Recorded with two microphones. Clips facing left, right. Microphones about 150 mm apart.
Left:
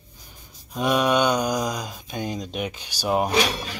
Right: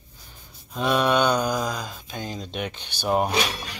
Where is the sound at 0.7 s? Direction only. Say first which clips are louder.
Left 1 dB; 10° left (ahead or behind).